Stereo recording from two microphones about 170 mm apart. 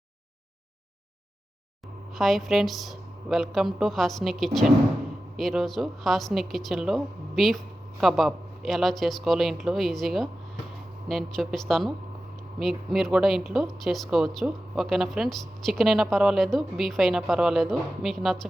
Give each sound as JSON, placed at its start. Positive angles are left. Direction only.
{"t": 2.1, "sound": "speech", "side_deg": 0}